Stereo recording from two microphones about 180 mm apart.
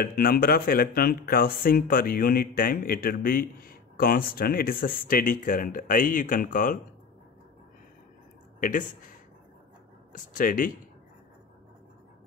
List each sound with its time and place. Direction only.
0.0 s speech: 55° left (ahead or behind)
8.5 s speech: 50° left (ahead or behind)
10.1 s speech: 50° left (ahead or behind)